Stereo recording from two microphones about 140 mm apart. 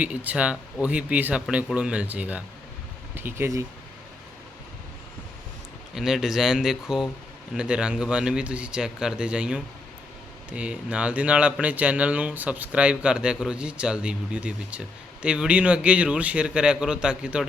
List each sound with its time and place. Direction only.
0.0 s speech: 10° right (ahead or behind)
5.9 s speech: 5° right (ahead or behind)